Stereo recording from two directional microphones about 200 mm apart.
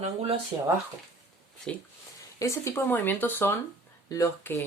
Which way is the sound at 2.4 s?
15° left (ahead or behind).